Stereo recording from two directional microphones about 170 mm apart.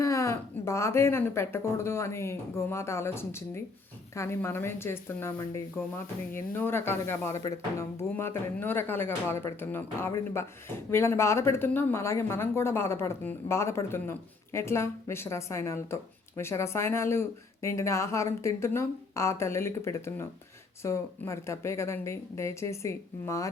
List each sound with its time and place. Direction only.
0.0 s speech: 15° left (ahead or behind)